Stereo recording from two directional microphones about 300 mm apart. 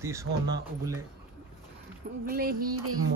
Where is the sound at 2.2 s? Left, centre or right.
Right.